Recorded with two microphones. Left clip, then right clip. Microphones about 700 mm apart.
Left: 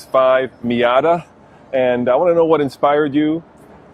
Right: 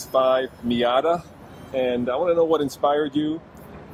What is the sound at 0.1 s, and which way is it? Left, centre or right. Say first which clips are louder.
Speech: left 6 dB; left.